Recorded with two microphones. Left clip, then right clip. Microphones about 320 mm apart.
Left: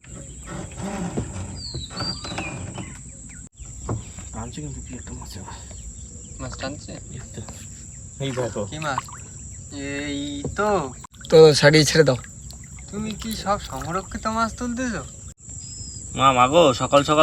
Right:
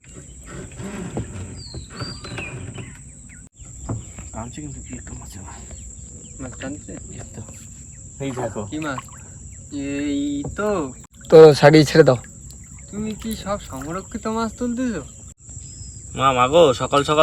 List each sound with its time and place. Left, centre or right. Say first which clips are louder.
0.5 s wild animals: left 2 dB; left
1.9 s a sound: left 3 dB; left
4.6 s speech: right 1 dB; centre
6.4 s speech: left 1 dB; centre
8.4 s speech: even; centre
11.3 s speech: right 4 dB; centre
12.9 s speech: right 1 dB; centre
16.1 s speech: right 1 dB; centre